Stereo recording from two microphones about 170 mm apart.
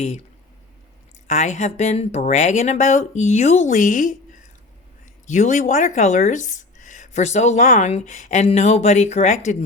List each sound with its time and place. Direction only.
1.3 s speech: 45° left (ahead or behind)